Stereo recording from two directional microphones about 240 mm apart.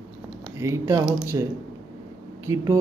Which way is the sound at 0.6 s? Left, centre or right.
Centre.